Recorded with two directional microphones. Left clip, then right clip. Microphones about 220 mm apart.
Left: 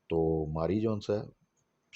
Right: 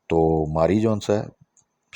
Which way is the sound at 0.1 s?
35° right (ahead or behind).